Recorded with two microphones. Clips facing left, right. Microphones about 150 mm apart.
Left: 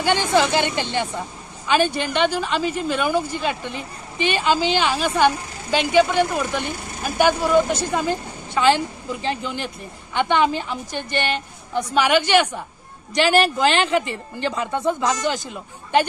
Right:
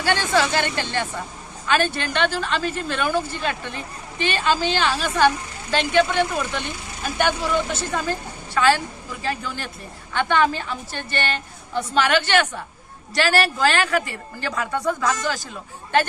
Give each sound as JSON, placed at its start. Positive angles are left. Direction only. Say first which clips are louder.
{"t": 0.0, "sound": "a woman's voice", "louder": "left 2 dB", "side_deg": 15}